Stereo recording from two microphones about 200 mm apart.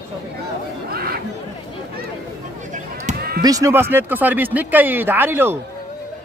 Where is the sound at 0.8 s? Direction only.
50° right (ahead or behind).